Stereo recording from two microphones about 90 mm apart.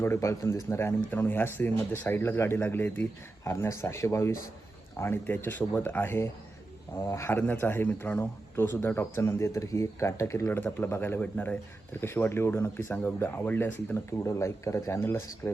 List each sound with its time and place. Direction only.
0.0 s speech: 30° left (ahead or behind)